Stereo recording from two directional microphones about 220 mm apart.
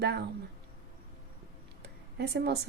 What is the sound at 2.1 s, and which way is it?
Speech, 50° right (ahead or behind).